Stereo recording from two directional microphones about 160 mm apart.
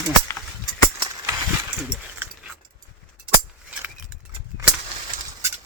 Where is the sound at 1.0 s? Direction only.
20° right (ahead or behind).